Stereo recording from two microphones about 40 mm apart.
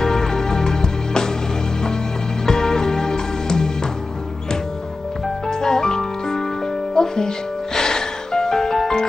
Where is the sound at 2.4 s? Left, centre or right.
Centre.